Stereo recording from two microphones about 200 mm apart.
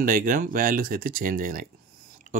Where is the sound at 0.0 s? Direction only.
45° right (ahead or behind).